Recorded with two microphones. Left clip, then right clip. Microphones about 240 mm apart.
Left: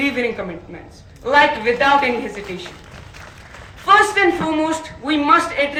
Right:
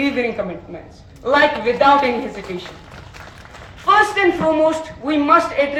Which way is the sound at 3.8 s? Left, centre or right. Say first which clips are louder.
Left 1 dB; left.